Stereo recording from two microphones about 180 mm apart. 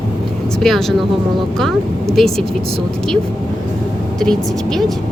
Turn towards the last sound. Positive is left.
turn(degrees=5)  # may be behind; listen again after turning